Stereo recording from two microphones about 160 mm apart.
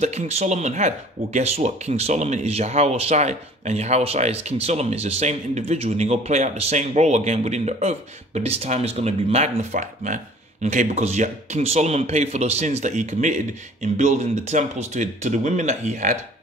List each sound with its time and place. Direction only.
0.0 s speech: 45° right (ahead or behind)